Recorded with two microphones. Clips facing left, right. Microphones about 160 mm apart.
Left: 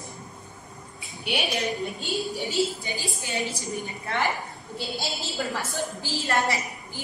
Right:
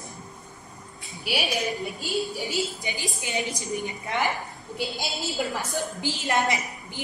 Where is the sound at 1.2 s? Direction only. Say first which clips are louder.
Even; centre (ahead or behind).